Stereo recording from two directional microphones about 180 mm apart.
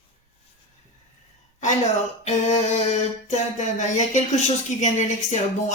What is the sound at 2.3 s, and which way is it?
A man's voice, 40° left (ahead or behind).